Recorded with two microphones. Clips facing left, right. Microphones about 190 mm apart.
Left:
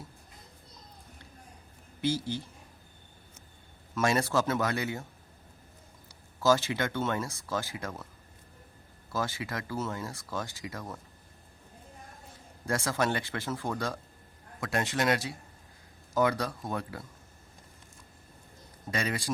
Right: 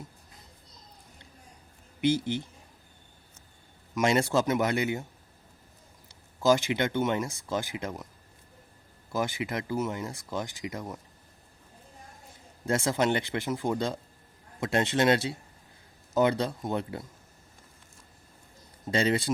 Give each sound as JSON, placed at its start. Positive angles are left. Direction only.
{"t": 2.0, "sound": "speech", "side_deg": -20}
{"t": 3.9, "sound": "speech", "side_deg": -20}
{"t": 6.4, "sound": "speech", "side_deg": -15}
{"t": 9.1, "sound": "speech", "side_deg": -20}
{"t": 12.6, "sound": "speech", "side_deg": -20}
{"t": 18.9, "sound": "speech", "side_deg": -25}